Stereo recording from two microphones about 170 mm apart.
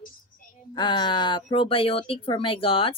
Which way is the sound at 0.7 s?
25° left (ahead or behind).